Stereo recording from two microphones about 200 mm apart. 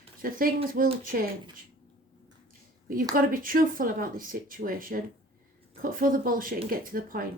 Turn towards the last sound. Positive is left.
turn(degrees=-45)  # may be behind; listen again after turning